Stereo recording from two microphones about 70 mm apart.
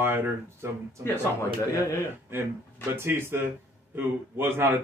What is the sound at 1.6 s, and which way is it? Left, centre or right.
Speech, left.